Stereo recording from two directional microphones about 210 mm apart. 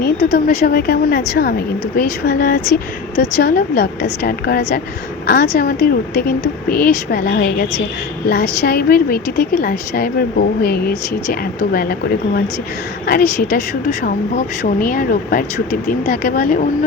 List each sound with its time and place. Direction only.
0.0 s a woman's voice: 45° left (ahead or behind)
14.0 s speech: 45° left (ahead or behind)